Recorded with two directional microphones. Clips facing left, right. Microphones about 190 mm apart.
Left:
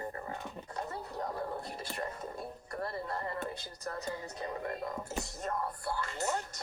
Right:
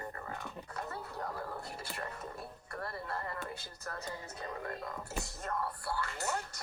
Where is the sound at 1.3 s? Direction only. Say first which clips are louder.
Left 4 dB; 25° left (ahead or behind).